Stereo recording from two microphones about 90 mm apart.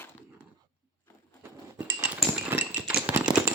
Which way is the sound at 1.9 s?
20° right (ahead or behind).